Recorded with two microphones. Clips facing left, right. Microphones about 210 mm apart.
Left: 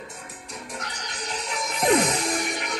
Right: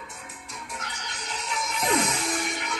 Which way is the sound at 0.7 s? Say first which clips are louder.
Left 3 dB; 45° left (ahead or behind).